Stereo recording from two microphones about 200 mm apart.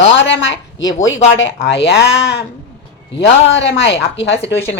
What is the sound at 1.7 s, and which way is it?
Speech, 60° left (ahead or behind).